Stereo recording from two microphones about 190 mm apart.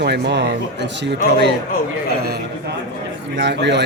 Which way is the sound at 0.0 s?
65° right (ahead or behind).